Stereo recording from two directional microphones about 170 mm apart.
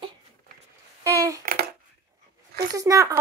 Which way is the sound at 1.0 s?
20° right (ahead or behind).